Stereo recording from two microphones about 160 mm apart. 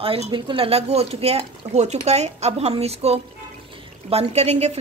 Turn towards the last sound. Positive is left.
turn(degrees=-45)  # may be behind; listen again after turning